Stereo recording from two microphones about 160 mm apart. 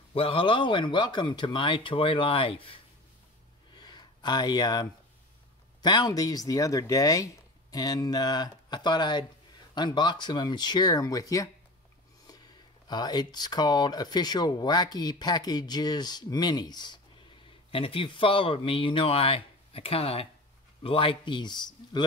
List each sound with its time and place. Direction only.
0.1 s speech: 35° left (ahead or behind)
3.7 s a sound: 25° left (ahead or behind)
5.8 s speech: 25° left (ahead or behind)
12.8 s speech: 25° left (ahead or behind)